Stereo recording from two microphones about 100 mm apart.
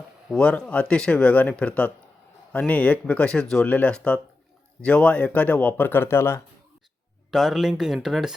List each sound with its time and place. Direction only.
0.3 s speech: 10° left (ahead or behind); by 6.4 s 25° left (ahead or behind)
7.3 s speech: centre (ahead or behind)